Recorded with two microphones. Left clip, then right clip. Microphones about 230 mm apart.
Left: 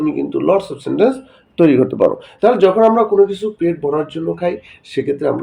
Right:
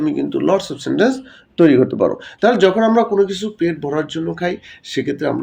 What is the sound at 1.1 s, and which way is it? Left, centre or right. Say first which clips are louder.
A man's voice: even; centre.